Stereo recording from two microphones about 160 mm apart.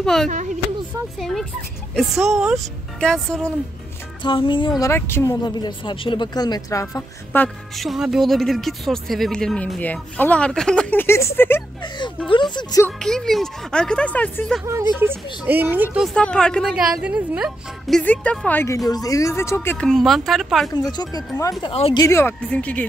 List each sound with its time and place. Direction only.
0.0 s a woman's voice: centre (ahead or behind)
4.2 s a woman's voice: 30° left (ahead or behind)
7.4 s speech: centre (ahead or behind)
12.3 s a woman's voice: 30° left (ahead or behind)
12.8 s speech: 5° left (ahead or behind)
14.6 s speech: 15° right (ahead or behind); by 19.9 s 15° left (ahead or behind)
19.9 s speech: centre (ahead or behind)
20.7 s a woman's voice: 25° left (ahead or behind); by 22.8 s 10° left (ahead or behind)